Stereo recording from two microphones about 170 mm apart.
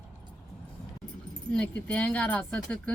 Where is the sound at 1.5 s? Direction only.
10° left (ahead or behind).